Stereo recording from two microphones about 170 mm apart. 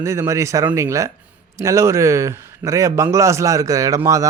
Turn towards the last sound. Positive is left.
turn(degrees=-20)  # may be behind; listen again after turning